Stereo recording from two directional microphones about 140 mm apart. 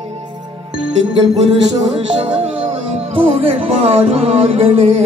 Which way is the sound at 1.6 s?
35° right (ahead or behind).